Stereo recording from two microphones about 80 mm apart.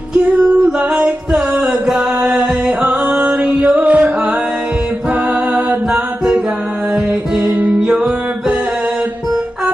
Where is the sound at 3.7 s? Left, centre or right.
Right.